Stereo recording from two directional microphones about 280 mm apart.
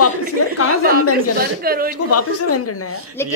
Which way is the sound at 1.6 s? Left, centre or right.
Right.